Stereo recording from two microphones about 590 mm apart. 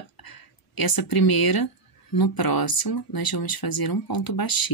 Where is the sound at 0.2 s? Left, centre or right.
Left.